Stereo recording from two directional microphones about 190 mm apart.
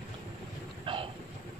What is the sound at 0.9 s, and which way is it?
Train, 25° right (ahead or behind).